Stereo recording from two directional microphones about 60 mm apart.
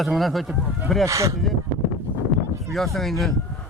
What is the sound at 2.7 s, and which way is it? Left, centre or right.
Speech, centre.